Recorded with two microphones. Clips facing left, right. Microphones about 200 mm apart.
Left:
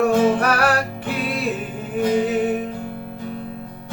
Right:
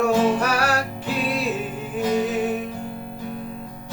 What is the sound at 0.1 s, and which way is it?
Music, 55° left (ahead or behind).